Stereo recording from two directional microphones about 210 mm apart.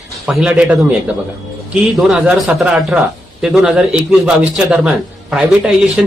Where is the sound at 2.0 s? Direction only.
5° right (ahead or behind).